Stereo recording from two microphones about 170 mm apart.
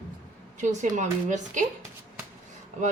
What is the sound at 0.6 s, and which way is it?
Speech, 45° right (ahead or behind).